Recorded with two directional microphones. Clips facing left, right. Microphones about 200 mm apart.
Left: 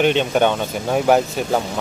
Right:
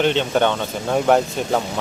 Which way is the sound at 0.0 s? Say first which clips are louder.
Left 2 dB; 15° left (ahead or behind).